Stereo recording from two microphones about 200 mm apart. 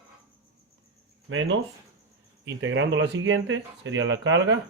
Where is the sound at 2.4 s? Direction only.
70° right (ahead or behind).